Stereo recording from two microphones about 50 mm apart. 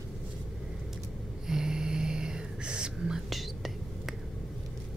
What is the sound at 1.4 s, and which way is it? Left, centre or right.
Whispering, centre.